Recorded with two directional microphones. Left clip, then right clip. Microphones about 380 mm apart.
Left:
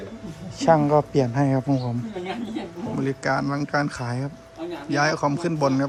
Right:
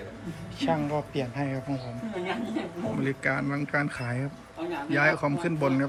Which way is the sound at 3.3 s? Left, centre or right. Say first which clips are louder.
Left 5 dB; centre.